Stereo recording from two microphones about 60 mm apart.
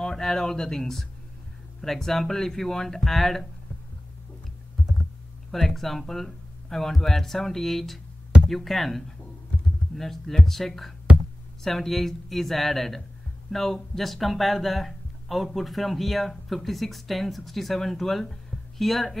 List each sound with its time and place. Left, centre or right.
0.0 s speech: centre
5.5 s speech: centre
11.1 s a sound: centre
11.6 s speech: centre